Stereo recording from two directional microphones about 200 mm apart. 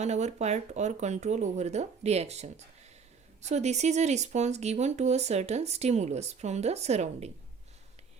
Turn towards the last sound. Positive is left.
turn(degrees=-35)  # may be behind; listen again after turning